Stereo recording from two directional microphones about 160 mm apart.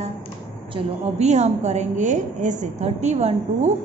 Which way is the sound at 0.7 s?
45° right (ahead or behind).